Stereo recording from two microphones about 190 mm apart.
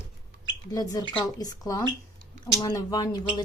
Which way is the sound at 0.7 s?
20° left (ahead or behind).